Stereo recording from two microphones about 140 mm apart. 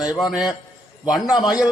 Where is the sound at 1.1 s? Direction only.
Centre (ahead or behind).